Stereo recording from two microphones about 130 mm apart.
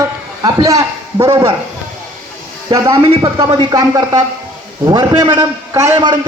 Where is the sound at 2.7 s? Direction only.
30° right (ahead or behind).